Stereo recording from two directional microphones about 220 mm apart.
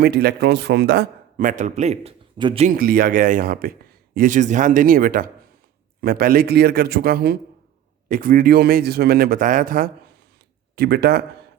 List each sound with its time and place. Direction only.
0.0 s a man's voice: 45° right (ahead or behind); by 2.6 s 25° right (ahead or behind)
2.6 s a man's voice: 40° right (ahead or behind)